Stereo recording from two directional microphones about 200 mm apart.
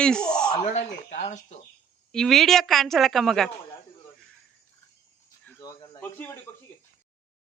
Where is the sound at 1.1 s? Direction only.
35° left (ahead or behind).